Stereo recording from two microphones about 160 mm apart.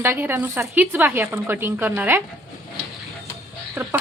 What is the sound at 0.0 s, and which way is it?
Speech, 15° right (ahead or behind).